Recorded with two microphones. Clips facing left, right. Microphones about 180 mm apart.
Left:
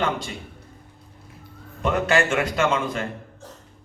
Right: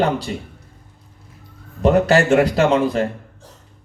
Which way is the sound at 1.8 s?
35° right (ahead or behind).